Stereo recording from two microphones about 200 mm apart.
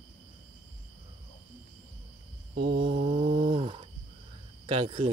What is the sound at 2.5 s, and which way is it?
Mantra, 45° right (ahead or behind).